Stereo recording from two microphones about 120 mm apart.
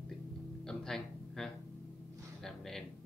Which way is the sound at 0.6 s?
5° left (ahead or behind).